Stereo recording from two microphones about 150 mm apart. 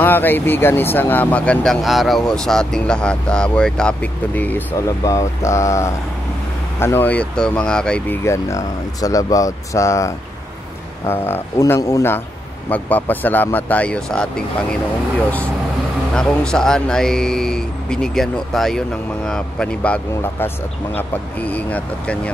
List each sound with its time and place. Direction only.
0.0 s speech: 15° left (ahead or behind)
8.2 s speech: 20° left (ahead or behind)
16.2 s a man's voice: 5° left (ahead or behind)